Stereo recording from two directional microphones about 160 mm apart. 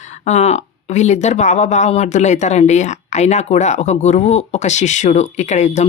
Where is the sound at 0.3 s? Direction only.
45° left (ahead or behind).